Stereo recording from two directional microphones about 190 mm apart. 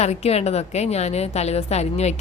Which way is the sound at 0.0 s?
35° left (ahead or behind).